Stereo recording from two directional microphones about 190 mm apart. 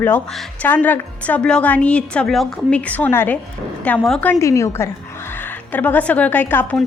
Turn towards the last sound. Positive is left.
turn(degrees=10)  # may be behind; listen again after turning